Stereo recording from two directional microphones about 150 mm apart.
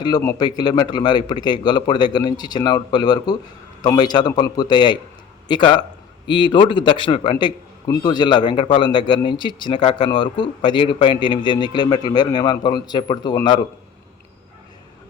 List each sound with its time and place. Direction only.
0.3 s a man's voice: 30° left (ahead or behind)